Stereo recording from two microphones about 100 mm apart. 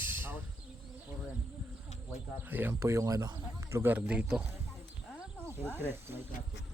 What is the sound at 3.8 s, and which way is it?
Speech, 15° right (ahead or behind).